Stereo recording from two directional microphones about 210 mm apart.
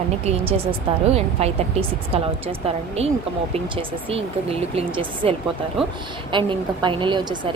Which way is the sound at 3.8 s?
25° right (ahead or behind).